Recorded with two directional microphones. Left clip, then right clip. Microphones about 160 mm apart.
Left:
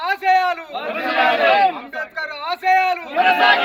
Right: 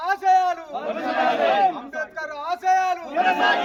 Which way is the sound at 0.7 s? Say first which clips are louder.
Left 3 dB; 15° right (ahead or behind).